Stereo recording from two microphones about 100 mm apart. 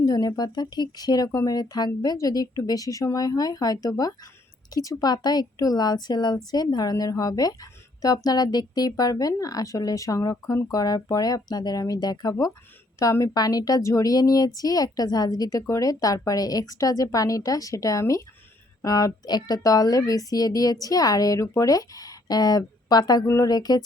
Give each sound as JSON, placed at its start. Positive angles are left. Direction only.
{"t": 0.0, "sound": "a woman's voice", "side_deg": 40}